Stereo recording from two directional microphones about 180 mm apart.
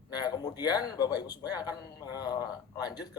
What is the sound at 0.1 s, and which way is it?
A man's voice, 20° left (ahead or behind).